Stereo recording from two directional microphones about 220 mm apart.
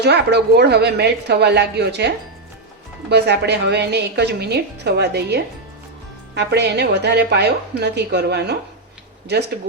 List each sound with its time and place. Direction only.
0.0 s a woman's voice: 50° right (ahead or behind)